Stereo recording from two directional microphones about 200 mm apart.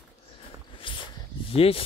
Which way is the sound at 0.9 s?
25° left (ahead or behind).